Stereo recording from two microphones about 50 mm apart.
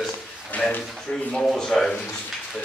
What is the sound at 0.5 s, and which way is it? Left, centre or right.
Speech, left.